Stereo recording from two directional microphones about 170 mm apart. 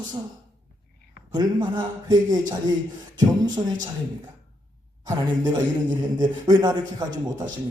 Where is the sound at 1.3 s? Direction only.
25° right (ahead or behind).